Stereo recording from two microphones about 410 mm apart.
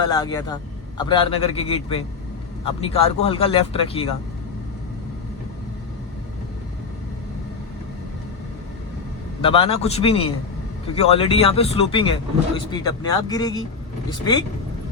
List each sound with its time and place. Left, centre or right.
0.0 s speech: centre
9.4 s speech: centre